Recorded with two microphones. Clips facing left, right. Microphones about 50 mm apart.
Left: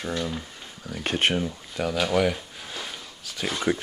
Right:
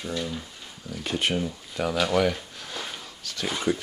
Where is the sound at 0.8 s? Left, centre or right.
Left.